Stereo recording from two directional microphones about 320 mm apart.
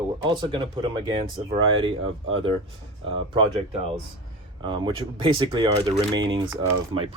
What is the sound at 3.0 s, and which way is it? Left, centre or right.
Speech, centre.